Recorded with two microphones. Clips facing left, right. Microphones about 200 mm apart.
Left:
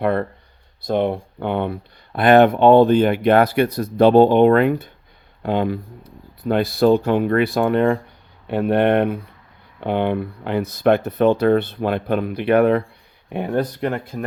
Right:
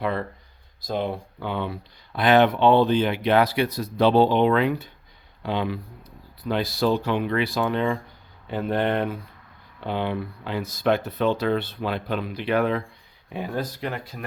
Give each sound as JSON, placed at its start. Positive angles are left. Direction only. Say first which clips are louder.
{"t": 0.0, "sound": "speech", "louder": "left 7 dB", "side_deg": 60}